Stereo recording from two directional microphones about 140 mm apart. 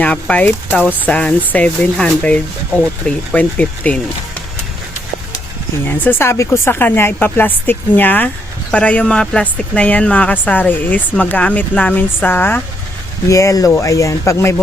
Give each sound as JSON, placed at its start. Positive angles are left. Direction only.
{"t": 0.0, "sound": "speech", "side_deg": 10}
{"t": 5.9, "sound": "speech", "side_deg": 15}